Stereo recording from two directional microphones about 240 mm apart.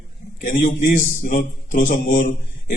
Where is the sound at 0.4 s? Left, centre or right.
Left.